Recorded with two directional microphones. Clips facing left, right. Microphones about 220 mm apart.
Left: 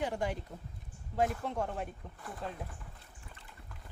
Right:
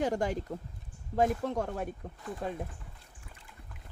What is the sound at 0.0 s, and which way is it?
Speech, 45° right (ahead or behind).